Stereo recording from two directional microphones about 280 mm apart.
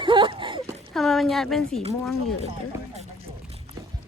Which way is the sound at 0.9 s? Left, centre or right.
Centre.